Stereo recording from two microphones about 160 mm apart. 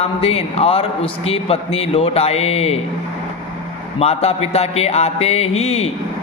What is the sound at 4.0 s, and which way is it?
Speech, 40° left (ahead or behind).